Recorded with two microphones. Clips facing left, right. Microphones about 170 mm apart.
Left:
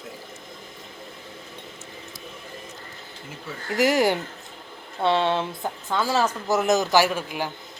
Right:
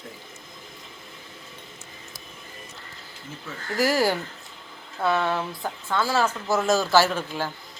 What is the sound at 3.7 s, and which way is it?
A man's voice, 20° left (ahead or behind).